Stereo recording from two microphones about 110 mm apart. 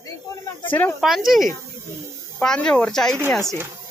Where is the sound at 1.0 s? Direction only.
5° right (ahead or behind).